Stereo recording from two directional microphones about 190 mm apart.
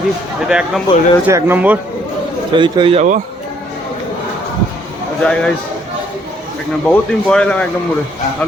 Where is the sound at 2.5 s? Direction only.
25° right (ahead or behind).